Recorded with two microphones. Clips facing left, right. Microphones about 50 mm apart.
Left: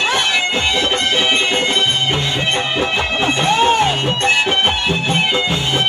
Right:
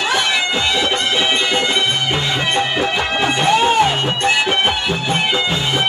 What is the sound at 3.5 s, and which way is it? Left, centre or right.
Music, left.